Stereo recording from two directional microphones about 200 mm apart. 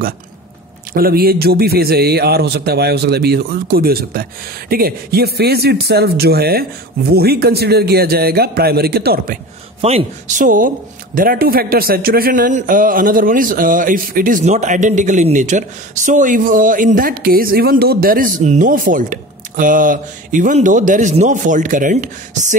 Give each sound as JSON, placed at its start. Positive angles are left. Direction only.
{"t": 0.9, "sound": "a man's voice", "side_deg": -50}
{"t": 9.8, "sound": "a man's voice", "side_deg": -30}